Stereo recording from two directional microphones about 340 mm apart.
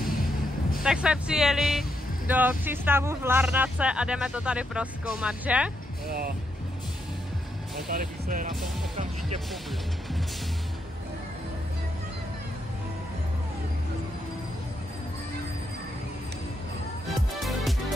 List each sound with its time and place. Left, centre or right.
0.8 s speech: centre
6.0 s speech: right
7.9 s speech: right
17.4 s music: centre